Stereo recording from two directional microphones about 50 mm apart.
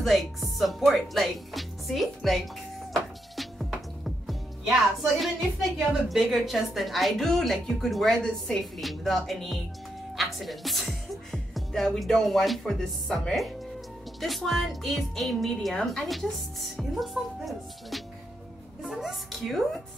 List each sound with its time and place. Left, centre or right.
0.0 s speech: centre
2.9 s music: centre
5.1 s speech: centre
8.2 s a woman's voice: centre
8.7 s speech: centre
11.5 s music: centre
12.3 s speech: centre
14.2 s speech: centre